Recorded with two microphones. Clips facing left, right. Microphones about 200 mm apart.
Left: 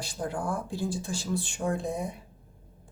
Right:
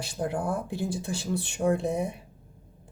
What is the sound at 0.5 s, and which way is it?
Speech, 60° right (ahead or behind).